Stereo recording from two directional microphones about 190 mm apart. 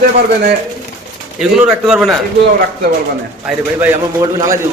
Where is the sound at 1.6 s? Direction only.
5° right (ahead or behind).